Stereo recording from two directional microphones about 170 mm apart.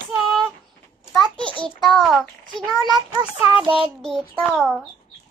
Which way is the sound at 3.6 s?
30° right (ahead or behind).